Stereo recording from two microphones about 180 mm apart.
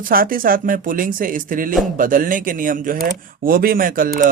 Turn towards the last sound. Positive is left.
turn(degrees=-50)  # may be behind; listen again after turning